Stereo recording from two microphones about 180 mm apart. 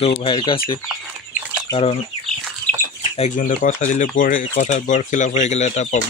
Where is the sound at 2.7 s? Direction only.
5° left (ahead or behind).